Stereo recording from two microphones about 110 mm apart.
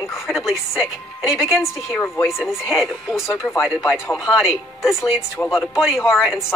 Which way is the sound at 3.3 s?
25° left (ahead or behind).